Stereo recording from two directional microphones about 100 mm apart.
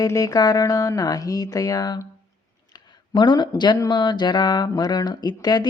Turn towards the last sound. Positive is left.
turn(degrees=45)  # may be behind; listen again after turning